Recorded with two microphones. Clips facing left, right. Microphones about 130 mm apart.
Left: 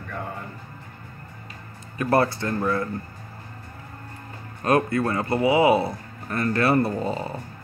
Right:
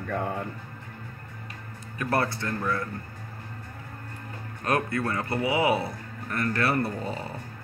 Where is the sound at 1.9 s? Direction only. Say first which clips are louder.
Left 6 dB; 25° left (ahead or behind).